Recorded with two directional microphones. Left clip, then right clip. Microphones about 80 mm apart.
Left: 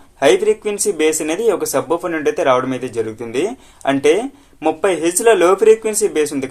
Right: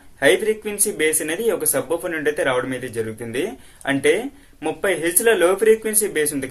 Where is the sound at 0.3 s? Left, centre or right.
Left.